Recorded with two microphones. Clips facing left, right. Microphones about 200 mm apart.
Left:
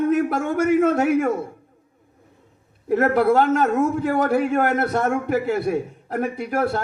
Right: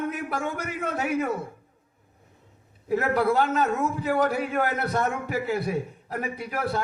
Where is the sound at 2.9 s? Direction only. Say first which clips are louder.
Left 6 dB; 45° left (ahead or behind).